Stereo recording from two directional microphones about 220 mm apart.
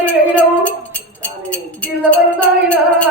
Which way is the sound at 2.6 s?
5° left (ahead or behind).